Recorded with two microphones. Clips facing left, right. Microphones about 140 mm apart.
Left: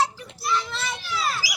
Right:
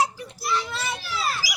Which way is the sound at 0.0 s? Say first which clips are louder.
Even; 10° right (ahead or behind).